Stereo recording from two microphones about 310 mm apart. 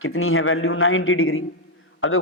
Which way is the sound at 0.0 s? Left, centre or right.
Left.